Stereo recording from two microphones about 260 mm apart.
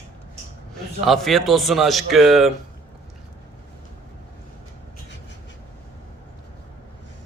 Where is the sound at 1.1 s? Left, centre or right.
Centre.